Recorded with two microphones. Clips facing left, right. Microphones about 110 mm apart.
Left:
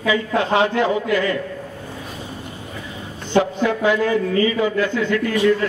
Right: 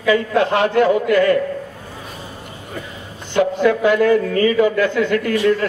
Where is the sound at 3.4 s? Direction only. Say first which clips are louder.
Right 5 dB; 55° right (ahead or behind).